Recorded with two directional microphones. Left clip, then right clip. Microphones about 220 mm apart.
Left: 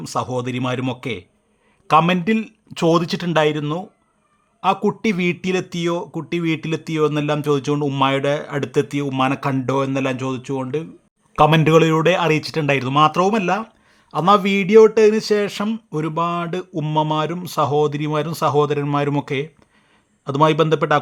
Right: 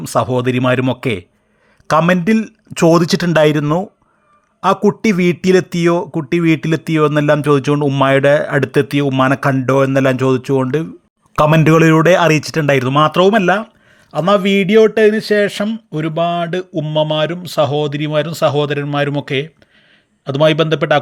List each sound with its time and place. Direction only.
0.0 s speech: 20° right (ahead or behind)
4.9 s speech: 20° right (ahead or behind)
8.0 s speech: 25° right (ahead or behind)
14.3 s a sound: centre (ahead or behind)